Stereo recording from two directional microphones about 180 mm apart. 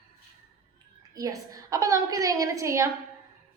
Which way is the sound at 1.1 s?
20° right (ahead or behind).